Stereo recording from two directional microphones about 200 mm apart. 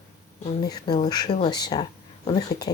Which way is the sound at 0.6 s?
20° left (ahead or behind).